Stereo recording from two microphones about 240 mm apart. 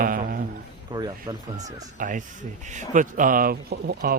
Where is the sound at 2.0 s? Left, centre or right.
Right.